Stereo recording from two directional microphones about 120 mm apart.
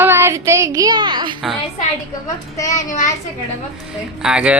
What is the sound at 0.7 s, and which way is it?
Speech, 35° right (ahead or behind).